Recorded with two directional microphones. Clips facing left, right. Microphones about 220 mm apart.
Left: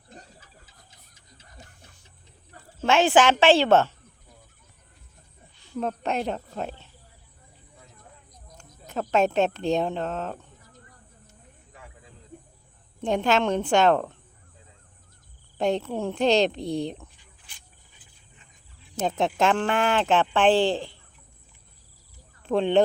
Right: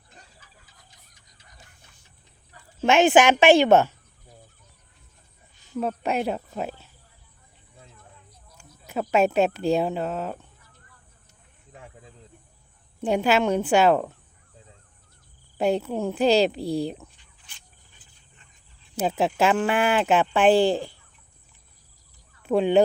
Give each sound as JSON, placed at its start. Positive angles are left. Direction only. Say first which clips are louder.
{"t": 2.8, "sound": "speech", "louder": "right 2 dB", "side_deg": -20}
{"t": 5.7, "sound": "speech", "louder": "right 2 dB", "side_deg": -5}
{"t": 8.9, "sound": "speech", "louder": "right 2 dB", "side_deg": -10}
{"t": 11.7, "sound": "snake", "louder": "right 4 dB", "side_deg": -30}
{"t": 13.0, "sound": "speech", "louder": "right 2 dB", "side_deg": -10}
{"t": 15.5, "sound": "speech", "louder": "right 2 dB", "side_deg": -5}
{"t": 18.9, "sound": "speech", "louder": "right 1 dB", "side_deg": -5}
{"t": 22.4, "sound": "speech", "louder": "right 2 dB", "side_deg": -10}